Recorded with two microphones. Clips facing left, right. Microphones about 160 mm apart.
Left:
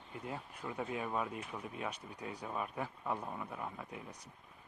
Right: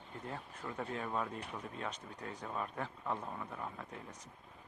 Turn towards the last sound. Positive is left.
turn(degrees=10)  # may be behind; listen again after turning